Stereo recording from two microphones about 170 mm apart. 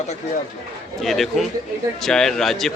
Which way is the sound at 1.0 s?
Centre (ahead or behind).